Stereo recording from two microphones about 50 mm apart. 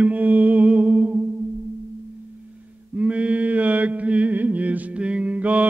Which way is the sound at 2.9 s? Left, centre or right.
Right.